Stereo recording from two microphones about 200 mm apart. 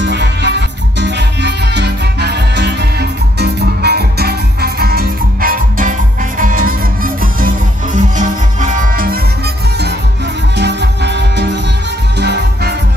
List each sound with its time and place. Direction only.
0.0 s music: 60° right (ahead or behind)
10.6 s music: 60° right (ahead or behind)